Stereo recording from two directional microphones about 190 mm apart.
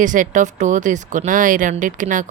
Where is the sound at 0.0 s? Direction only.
40° right (ahead or behind).